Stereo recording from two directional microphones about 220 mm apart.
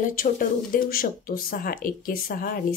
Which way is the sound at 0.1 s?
40° left (ahead or behind).